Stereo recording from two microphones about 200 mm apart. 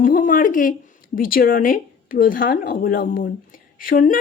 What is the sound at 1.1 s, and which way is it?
Speech, 45° left (ahead or behind).